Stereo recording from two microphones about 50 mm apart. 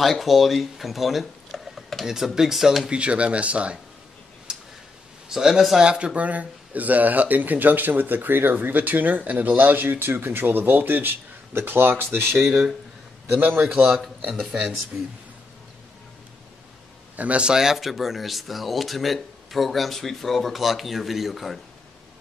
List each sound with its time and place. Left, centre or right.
0.0 s speech: centre
2.9 s speech: right
5.3 s speech: centre
5.9 s speech: centre; by 12.4 s right
12.4 s speech: centre
14.9 s speech: right
17.2 s speech: right
17.5 s speech: centre